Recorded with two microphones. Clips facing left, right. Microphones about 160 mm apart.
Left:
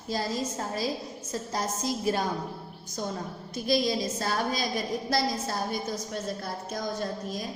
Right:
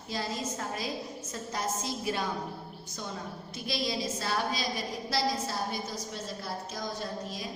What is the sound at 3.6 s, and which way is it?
A woman's voice, 45° left (ahead or behind).